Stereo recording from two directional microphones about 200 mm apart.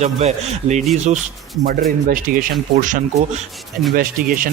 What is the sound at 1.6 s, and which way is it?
Speech, 45° right (ahead or behind).